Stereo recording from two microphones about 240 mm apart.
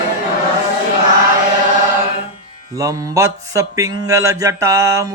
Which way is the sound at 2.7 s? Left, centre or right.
Centre.